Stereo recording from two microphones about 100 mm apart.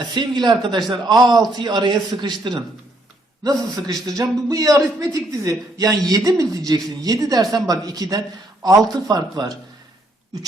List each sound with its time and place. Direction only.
0.1 s a man's voice: 50° right (ahead or behind)
3.4 s a man's voice: 35° right (ahead or behind)